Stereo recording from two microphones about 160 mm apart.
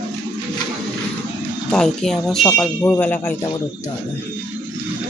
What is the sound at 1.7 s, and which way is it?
Speech, 5° left (ahead or behind).